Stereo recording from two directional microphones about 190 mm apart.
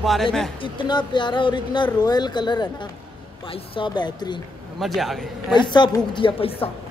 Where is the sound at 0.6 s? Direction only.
25° left (ahead or behind).